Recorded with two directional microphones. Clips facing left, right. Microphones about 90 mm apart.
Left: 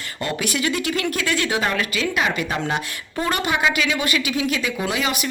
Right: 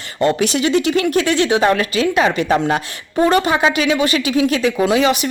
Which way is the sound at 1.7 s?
40° right (ahead or behind).